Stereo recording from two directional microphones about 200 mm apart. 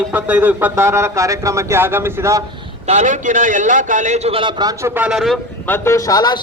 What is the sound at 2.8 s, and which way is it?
A man's voice, 35° right (ahead or behind).